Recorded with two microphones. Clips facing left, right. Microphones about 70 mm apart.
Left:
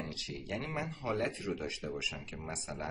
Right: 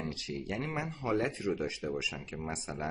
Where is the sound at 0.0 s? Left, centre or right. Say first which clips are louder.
Right 4 dB; right.